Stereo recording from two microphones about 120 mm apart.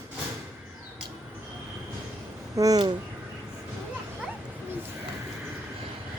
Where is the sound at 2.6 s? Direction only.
30° right (ahead or behind).